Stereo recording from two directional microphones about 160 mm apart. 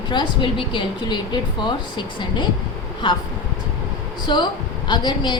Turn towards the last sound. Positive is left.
turn(degrees=30)  # may be behind; listen again after turning